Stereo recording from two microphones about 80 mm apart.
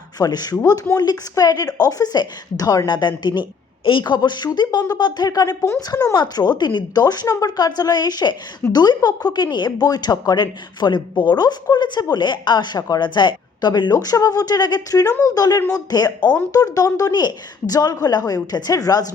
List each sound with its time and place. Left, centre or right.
0.2 s a woman's voice: left
3.8 s speech: left
6.1 s a woman's voice: left